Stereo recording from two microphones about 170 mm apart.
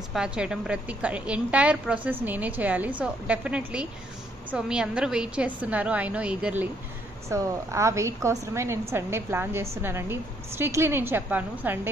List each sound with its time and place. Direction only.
0.1 s a woman's voice: 5° right (ahead or behind)